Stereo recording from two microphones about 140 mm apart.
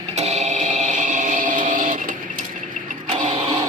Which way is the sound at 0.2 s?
50° right (ahead or behind).